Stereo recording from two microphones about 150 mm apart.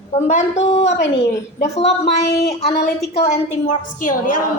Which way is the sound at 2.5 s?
45° left (ahead or behind).